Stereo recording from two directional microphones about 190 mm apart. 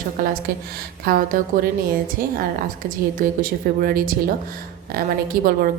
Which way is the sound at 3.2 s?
50° right (ahead or behind).